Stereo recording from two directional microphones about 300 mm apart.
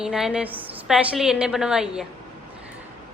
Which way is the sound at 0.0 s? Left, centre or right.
Centre.